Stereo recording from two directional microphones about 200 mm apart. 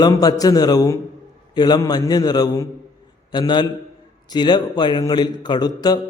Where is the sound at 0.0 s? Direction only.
20° left (ahead or behind).